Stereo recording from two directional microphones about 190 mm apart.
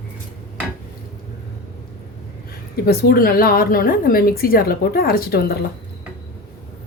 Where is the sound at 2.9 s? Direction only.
55° left (ahead or behind).